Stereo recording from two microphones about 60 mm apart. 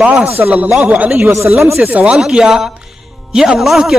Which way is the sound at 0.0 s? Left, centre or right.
Right.